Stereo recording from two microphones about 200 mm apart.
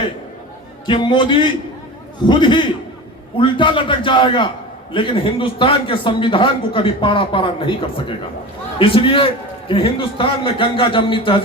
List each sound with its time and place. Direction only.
0.9 s a man's voice: 25° left (ahead or behind)